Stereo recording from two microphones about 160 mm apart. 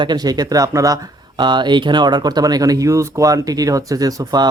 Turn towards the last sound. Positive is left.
turn(degrees=-25)  # may be behind; listen again after turning